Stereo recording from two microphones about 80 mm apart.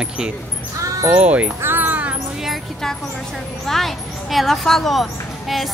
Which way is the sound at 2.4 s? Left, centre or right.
Centre.